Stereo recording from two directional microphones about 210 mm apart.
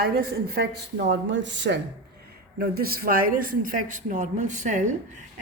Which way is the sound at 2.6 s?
45° right (ahead or behind).